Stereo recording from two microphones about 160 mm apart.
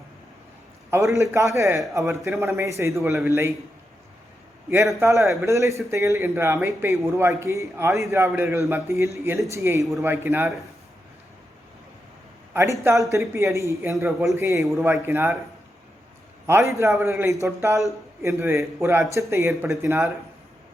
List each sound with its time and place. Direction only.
0.9 s a man's voice: 20° right (ahead or behind)
4.7 s speech: 15° right (ahead or behind)
12.5 s speech: 15° right (ahead or behind)
16.5 s a man's voice: 15° right (ahead or behind)